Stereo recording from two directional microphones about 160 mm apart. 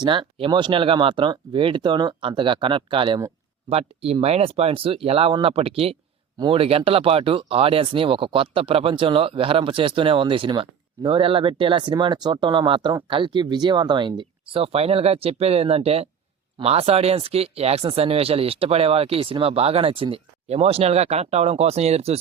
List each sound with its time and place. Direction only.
0.0 s speech: 30° right (ahead or behind)